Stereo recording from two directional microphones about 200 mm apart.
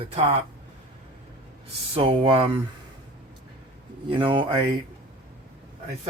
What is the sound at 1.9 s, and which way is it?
Speech, 25° right (ahead or behind).